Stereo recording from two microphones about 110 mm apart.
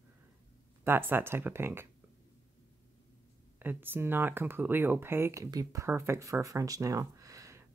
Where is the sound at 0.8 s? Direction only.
20° right (ahead or behind).